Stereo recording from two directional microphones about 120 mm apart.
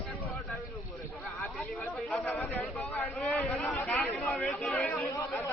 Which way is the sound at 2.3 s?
15° left (ahead or behind).